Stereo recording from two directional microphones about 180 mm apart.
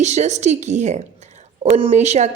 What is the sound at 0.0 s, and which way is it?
A woman's voice, 40° right (ahead or behind).